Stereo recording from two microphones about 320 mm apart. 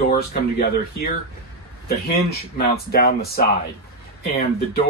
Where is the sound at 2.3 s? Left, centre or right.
Left.